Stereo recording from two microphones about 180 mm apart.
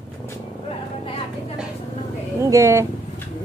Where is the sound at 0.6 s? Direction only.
30° left (ahead or behind).